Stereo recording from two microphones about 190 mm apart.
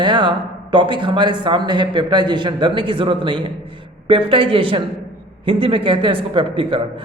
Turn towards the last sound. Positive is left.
turn(degrees=-25)  # may be behind; listen again after turning